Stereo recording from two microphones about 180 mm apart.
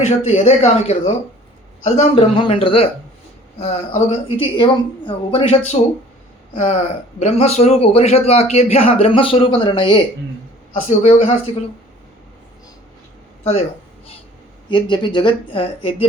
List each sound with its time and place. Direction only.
0.2 s a man's voice: 35° left (ahead or behind)
10.8 s speech: 45° left (ahead or behind)
13.4 s speech: 35° left (ahead or behind)
14.7 s speech: 25° left (ahead or behind)